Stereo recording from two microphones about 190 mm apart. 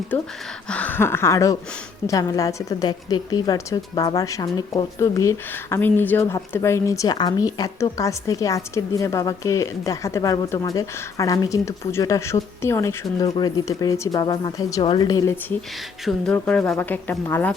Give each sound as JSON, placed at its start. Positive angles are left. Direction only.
{"t": 0.7, "sound": "a woman's voice", "side_deg": 10}
{"t": 13.2, "sound": "speech", "side_deg": 25}
{"t": 16.0, "sound": "a woman's voice", "side_deg": 5}